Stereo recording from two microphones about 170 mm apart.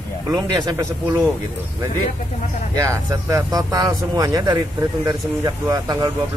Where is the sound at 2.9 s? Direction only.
20° right (ahead or behind).